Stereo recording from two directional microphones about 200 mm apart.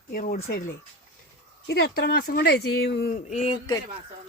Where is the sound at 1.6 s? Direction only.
55° left (ahead or behind).